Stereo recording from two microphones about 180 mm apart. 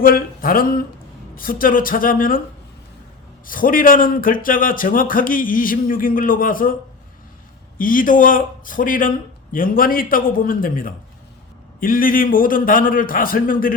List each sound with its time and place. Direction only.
0.0 s speech: 55° left (ahead or behind)
3.4 s speech: 50° left (ahead or behind)
7.8 s speech: 50° left (ahead or behind)